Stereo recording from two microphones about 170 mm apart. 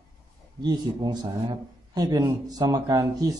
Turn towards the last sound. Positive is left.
turn(degrees=-20)  # may be behind; listen again after turning